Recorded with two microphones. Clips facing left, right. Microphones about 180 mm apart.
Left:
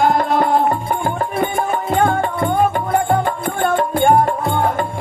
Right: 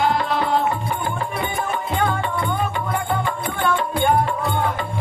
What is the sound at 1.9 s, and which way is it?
Music, 45° left (ahead or behind).